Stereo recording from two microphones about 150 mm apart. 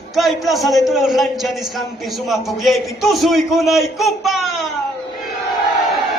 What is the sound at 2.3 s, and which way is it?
A man's voice, centre (ahead or behind).